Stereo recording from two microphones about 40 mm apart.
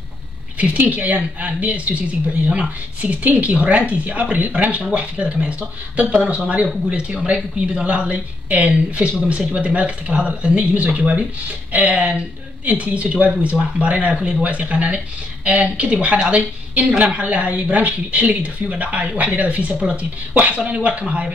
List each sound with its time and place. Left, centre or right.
0.6 s speech: right